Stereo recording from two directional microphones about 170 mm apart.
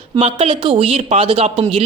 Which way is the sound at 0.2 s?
35° right (ahead or behind).